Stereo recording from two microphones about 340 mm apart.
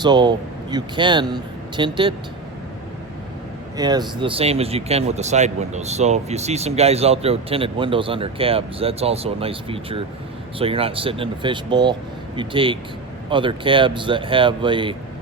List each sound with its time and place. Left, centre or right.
0.0 s speech: centre
3.8 s speech: centre